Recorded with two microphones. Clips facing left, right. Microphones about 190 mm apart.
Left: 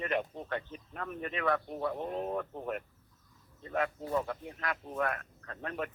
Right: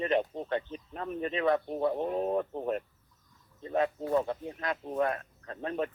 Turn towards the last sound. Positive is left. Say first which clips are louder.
# right 5 dB
turn(degrees=-25)  # may be behind; listen again after turning